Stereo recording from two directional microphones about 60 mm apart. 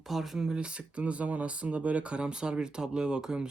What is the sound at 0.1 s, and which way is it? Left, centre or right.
Speech, centre.